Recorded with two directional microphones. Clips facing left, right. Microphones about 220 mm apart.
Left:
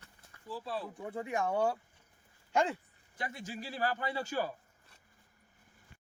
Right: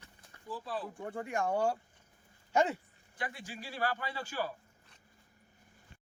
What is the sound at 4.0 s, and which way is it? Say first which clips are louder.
Speech: left 4 dB; 20° left (ahead or behind).